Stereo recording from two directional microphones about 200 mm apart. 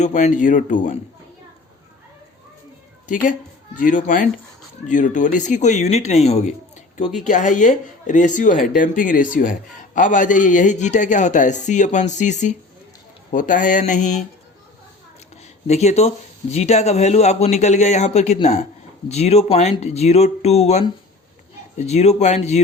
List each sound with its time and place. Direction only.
0.0 s a man's voice: 35° left (ahead or behind)
3.8 s a man's voice: 40° left (ahead or behind)
15.6 s a man's voice: 35° left (ahead or behind)